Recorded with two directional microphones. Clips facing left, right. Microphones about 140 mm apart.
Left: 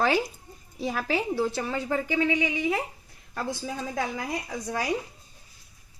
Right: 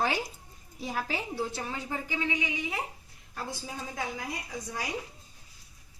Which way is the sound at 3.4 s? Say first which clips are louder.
Left 6 dB; 70° left (ahead or behind).